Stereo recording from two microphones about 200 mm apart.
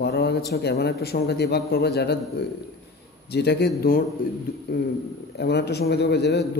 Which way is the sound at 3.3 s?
55° left (ahead or behind).